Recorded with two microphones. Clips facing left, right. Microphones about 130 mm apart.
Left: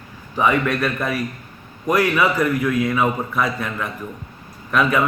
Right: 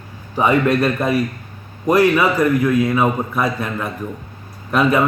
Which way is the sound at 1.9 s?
25° right (ahead or behind).